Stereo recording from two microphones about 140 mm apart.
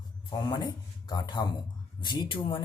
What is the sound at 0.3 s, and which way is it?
A man's voice, 30° left (ahead or behind).